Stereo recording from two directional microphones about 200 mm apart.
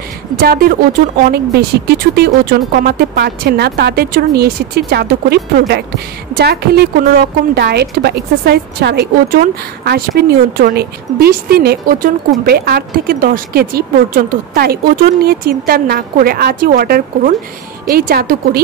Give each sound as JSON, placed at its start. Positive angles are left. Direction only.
{"t": 0.4, "sound": "a woman's voice", "side_deg": -50}